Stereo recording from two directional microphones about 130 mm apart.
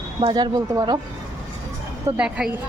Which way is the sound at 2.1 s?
10° right (ahead or behind).